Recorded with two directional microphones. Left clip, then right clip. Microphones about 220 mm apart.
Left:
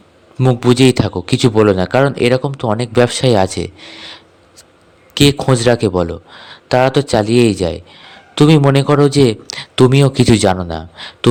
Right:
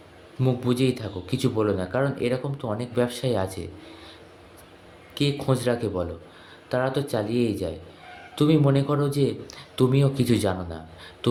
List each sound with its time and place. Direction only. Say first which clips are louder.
0.3 s speech: left 13 dB; 40° left (ahead or behind)